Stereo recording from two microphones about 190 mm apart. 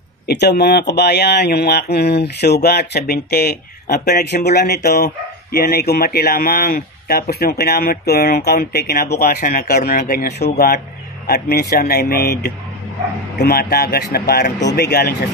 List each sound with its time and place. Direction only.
0.3 s speech: 60° left (ahead or behind)
11.2 s speech: 55° left (ahead or behind)